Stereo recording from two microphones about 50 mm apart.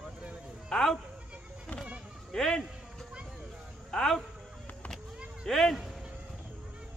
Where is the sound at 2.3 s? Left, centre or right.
Centre.